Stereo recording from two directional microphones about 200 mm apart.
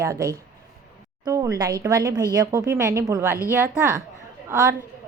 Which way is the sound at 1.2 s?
15° right (ahead or behind).